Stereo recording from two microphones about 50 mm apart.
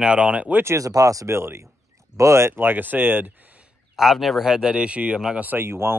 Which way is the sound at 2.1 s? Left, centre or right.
Right.